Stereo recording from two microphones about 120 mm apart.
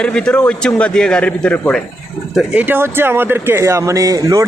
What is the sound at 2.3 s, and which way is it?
Speech, 10° right (ahead or behind).